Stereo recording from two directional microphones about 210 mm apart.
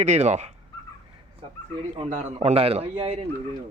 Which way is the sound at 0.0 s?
35° right (ahead or behind).